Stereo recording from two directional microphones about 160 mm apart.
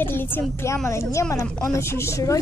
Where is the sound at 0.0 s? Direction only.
15° left (ahead or behind).